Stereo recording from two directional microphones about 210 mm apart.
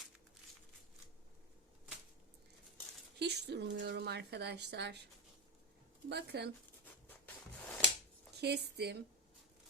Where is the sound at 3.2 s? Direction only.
55° right (ahead or behind).